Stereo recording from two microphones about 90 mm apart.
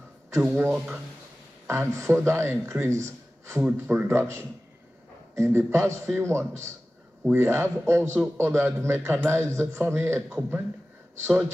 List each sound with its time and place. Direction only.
0.4 s a man's voice: 20° right (ahead or behind)
1.7 s a man's voice: 30° right (ahead or behind)